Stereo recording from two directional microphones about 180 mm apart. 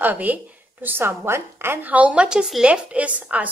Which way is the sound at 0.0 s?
10° right (ahead or behind).